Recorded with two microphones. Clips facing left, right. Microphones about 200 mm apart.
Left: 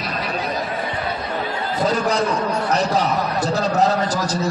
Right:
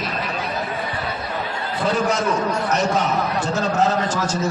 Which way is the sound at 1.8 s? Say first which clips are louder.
Left 1 dB; 35° left (ahead or behind).